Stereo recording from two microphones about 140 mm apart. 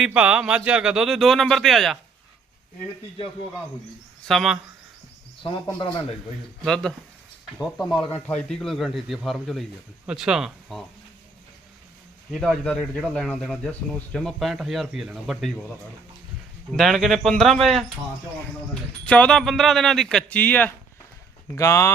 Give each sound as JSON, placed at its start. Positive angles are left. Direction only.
{"t": 0.0, "sound": "speech", "side_deg": -10}
{"t": 4.3, "sound": "speech", "side_deg": 0}
{"t": 5.4, "sound": "speech", "side_deg": 35}
{"t": 6.7, "sound": "speech", "side_deg": 5}
{"t": 12.3, "sound": "speech", "side_deg": 5}
{"t": 16.7, "sound": "speech", "side_deg": 0}
{"t": 21.5, "sound": "speech", "side_deg": 20}